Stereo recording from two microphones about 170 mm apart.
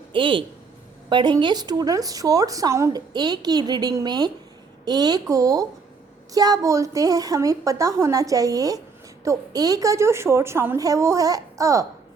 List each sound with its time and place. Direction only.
0.1 s a woman's voice: 30° right (ahead or behind)